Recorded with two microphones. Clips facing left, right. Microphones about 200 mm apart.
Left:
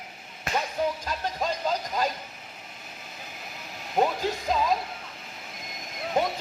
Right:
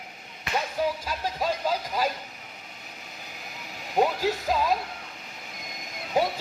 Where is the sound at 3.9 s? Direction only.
5° right (ahead or behind).